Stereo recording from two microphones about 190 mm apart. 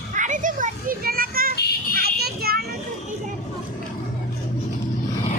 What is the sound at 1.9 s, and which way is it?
Children playing, 55° right (ahead or behind).